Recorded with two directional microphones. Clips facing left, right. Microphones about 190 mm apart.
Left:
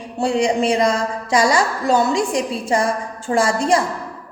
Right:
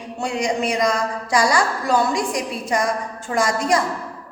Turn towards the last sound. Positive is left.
turn(degrees=30)  # may be behind; listen again after turning